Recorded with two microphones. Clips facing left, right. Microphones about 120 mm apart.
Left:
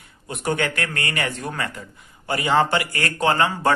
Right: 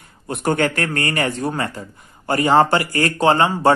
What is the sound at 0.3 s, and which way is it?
Speech, 45° right (ahead or behind).